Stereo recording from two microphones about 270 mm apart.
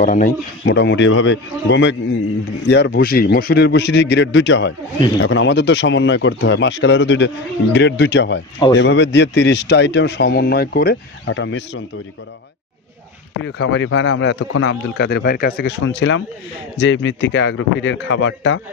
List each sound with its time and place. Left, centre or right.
0.0 s speech: left
13.4 s speech: left